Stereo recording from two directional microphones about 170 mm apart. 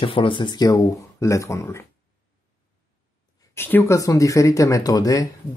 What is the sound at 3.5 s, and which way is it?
Speech, 15° left (ahead or behind).